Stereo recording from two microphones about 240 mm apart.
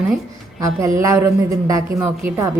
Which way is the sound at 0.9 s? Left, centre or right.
Centre.